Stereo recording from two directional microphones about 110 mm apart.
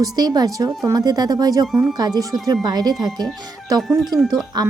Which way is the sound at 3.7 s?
Centre (ahead or behind).